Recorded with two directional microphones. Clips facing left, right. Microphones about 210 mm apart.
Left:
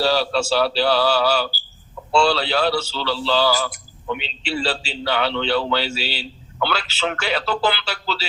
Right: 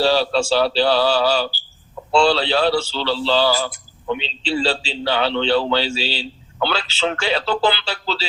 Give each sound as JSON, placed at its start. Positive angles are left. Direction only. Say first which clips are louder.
{"t": 0.0, "sound": "a man's voice", "louder": "right 2 dB", "side_deg": -30}